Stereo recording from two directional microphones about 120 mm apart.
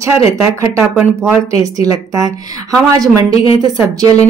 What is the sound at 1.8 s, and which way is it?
A woman's voice, 30° right (ahead or behind).